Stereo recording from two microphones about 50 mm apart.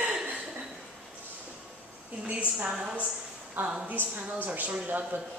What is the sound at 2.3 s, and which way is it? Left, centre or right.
Speech, right.